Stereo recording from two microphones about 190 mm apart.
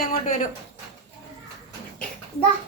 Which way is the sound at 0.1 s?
45° left (ahead or behind).